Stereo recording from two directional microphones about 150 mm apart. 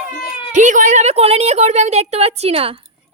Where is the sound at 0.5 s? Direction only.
55° right (ahead or behind); by 2.7 s 40° right (ahead or behind).